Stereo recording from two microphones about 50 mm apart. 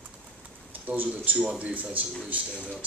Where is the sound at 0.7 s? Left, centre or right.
Right.